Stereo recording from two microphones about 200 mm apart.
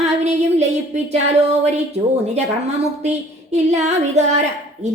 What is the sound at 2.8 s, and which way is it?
A woman's voice, 35° right (ahead or behind).